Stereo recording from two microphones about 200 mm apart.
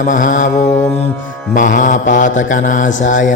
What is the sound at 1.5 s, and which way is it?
Mantra, 40° left (ahead or behind).